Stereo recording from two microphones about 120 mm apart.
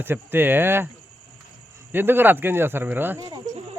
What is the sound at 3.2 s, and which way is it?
Cricket, 30° right (ahead or behind).